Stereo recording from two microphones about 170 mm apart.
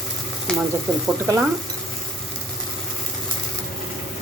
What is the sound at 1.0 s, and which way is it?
Speech, 20° right (ahead or behind).